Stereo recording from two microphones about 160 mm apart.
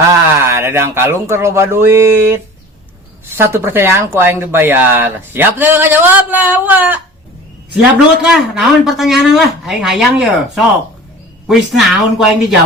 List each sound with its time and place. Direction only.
0.1 s speech: 15° right (ahead or behind)
8.2 s speech: 5° right (ahead or behind)